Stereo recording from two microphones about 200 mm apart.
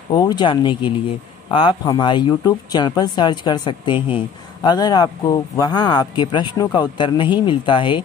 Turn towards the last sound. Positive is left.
turn(degrees=25)  # may be behind; listen again after turning